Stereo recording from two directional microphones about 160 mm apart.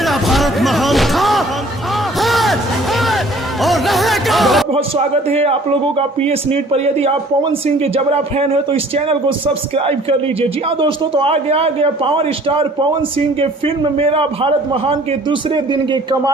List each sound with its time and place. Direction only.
0.0 s a sound: centre (ahead or behind)
2.2 s music: centre (ahead or behind)
3.6 s music: centre (ahead or behind)
4.7 s a man's voice: 40° right (ahead or behind)